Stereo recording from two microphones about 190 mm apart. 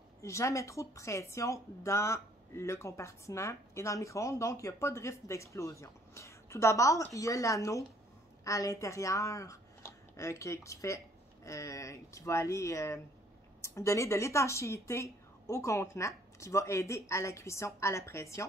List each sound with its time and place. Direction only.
0.2 s a woman's voice: 15° left (ahead or behind)